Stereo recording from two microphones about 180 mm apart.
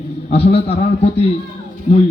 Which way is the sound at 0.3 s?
35° left (ahead or behind).